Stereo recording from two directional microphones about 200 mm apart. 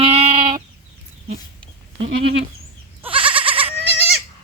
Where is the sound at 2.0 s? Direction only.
60° right (ahead or behind).